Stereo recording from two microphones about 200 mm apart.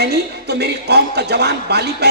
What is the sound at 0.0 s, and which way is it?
A man's voice, 55° right (ahead or behind).